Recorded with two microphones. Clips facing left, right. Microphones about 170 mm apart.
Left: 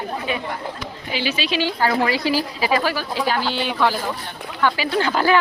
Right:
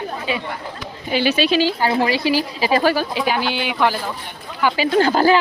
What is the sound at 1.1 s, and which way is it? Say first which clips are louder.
Speech: right 7 dB; 55° right (ahead or behind).